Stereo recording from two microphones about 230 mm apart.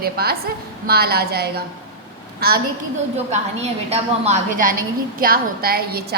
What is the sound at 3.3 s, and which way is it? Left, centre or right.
A woman's voice, right.